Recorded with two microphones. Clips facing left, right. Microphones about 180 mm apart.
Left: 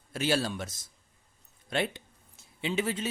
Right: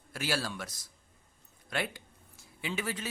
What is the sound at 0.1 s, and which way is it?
Speech, 25° left (ahead or behind).